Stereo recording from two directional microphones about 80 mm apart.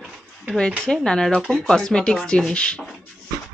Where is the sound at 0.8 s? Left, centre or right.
Centre.